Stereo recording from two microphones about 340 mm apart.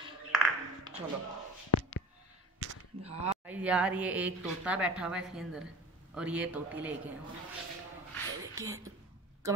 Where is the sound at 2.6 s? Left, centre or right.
Right.